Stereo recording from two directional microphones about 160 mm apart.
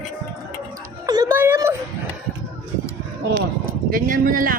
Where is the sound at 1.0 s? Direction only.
25° right (ahead or behind).